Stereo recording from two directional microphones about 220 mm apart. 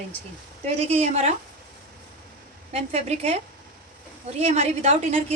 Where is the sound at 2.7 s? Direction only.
30° right (ahead or behind).